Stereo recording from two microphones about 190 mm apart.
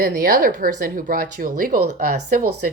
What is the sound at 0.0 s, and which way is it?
Speech, 45° right (ahead or behind).